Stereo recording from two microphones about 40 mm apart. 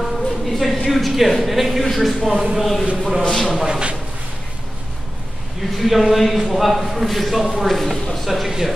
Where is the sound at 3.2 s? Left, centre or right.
Centre.